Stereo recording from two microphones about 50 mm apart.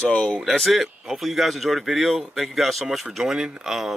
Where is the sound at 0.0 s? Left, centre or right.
Left.